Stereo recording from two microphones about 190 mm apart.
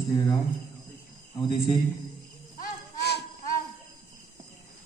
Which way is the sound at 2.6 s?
60° left (ahead or behind).